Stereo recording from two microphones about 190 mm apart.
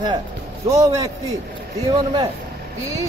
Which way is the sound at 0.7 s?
20° right (ahead or behind).